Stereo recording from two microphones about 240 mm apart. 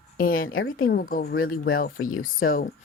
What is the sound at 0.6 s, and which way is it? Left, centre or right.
Speech, left.